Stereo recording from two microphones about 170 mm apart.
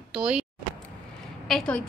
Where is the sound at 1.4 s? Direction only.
5° left (ahead or behind).